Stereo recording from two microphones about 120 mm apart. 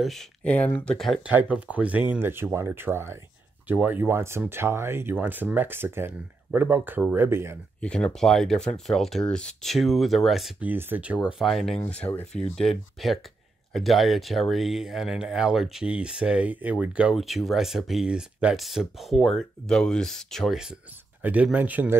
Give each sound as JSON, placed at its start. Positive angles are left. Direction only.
{"t": 0.0, "sound": "speech", "side_deg": 0}
{"t": 0.4, "sound": "speech", "side_deg": 10}
{"t": 1.3, "sound": "speech", "side_deg": -10}
{"t": 7.8, "sound": "speech", "side_deg": 5}
{"t": 10.6, "sound": "speech", "side_deg": -15}
{"t": 11.2, "sound": "speech", "side_deg": 0}